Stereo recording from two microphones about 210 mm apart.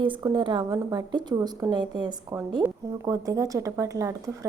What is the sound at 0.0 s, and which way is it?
A woman's voice, 20° right (ahead or behind).